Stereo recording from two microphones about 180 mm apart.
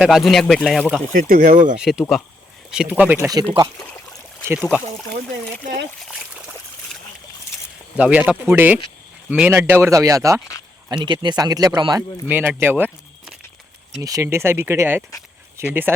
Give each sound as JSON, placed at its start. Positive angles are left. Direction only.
{"t": 0.0, "sound": "speech", "side_deg": 0}
{"t": 1.3, "sound": "speech", "side_deg": -50}
{"t": 1.8, "sound": "speech", "side_deg": 0}
{"t": 4.4, "sound": "speech", "side_deg": -10}
{"t": 7.9, "sound": "speech", "side_deg": -10}